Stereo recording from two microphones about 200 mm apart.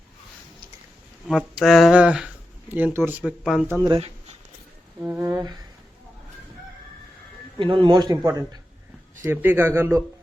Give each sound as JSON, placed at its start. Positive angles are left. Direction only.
{"t": 1.3, "sound": "speech", "side_deg": 0}
{"t": 3.7, "sound": "speech", "side_deg": -15}
{"t": 4.9, "sound": "a sound", "side_deg": -10}
{"t": 7.6, "sound": "a man's voice", "side_deg": -25}